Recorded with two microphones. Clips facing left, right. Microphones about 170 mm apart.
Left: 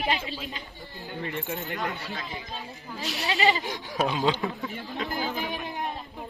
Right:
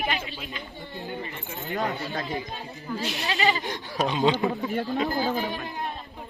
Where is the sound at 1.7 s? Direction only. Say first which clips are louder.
Right 4 dB; 40° right (ahead or behind).